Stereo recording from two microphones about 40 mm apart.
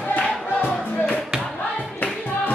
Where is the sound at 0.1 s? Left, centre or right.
Left.